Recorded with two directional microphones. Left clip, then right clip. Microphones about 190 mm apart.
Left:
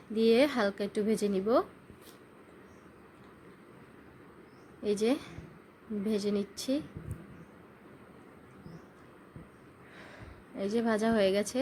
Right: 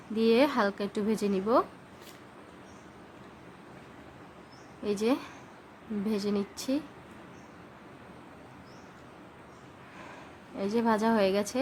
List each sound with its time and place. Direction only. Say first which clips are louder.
0.1 s a woman's voice: right 1 dB; 10° left (ahead or behind)
4.8 s a woman's voice: right 1 dB; 10° left (ahead or behind)
10.6 s a woman's voice: right 3 dB; 10° left (ahead or behind)